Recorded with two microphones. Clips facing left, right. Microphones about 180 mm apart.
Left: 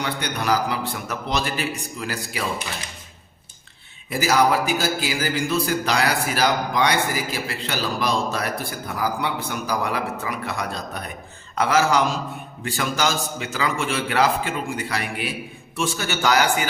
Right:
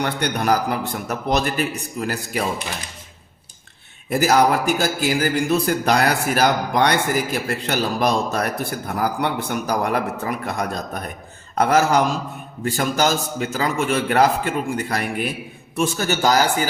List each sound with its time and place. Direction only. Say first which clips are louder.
0.0 s speech: right 4 dB; 50° right (ahead or behind)
4.1 s a man's voice: right 3 dB; 50° right (ahead or behind)